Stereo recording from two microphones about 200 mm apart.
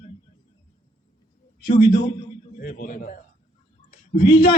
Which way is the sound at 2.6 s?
40° left (ahead or behind).